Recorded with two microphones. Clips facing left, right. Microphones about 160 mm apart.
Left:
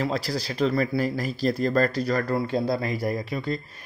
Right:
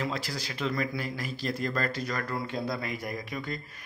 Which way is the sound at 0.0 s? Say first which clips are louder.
Left 6 dB; 35° left (ahead or behind).